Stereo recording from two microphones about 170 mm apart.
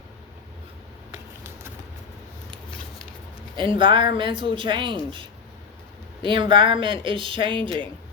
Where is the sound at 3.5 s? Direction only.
30° right (ahead or behind).